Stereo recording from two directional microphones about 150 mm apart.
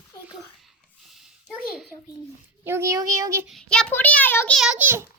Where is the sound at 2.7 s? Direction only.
15° right (ahead or behind).